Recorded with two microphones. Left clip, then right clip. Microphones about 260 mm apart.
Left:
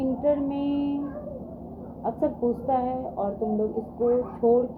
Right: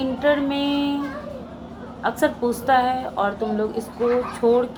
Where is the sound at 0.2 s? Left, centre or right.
Right.